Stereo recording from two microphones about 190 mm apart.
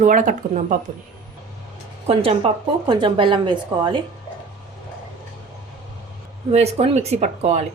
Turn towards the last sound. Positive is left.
turn(degrees=-35)  # may be behind; listen again after turning